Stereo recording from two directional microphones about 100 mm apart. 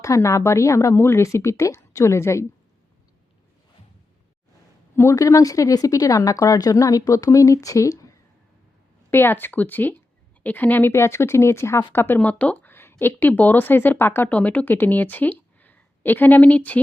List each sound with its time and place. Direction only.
0.0 s speech: 30° left (ahead or behind)
4.9 s speech: 30° left (ahead or behind)
9.0 s speech: 20° left (ahead or behind)